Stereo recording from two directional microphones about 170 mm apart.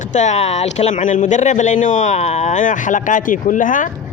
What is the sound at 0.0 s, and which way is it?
Speech, 45° left (ahead or behind).